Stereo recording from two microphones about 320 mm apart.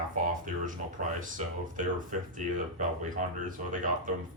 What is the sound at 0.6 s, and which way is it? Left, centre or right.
Speech, right.